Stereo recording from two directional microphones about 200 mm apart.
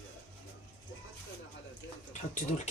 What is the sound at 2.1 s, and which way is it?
Speech, 40° left (ahead or behind).